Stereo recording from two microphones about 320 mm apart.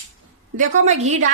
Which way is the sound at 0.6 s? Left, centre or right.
Right.